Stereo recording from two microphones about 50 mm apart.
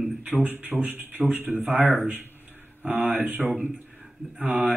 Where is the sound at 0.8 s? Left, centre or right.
Right.